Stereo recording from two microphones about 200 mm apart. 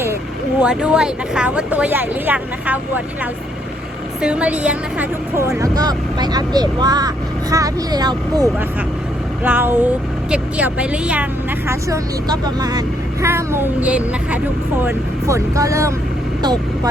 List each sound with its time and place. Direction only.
0.6 s speech: 5° right (ahead or behind)
4.2 s speech: 5° right (ahead or behind)
9.4 s speech: 10° right (ahead or behind)
11.7 s speech: 20° right (ahead or behind)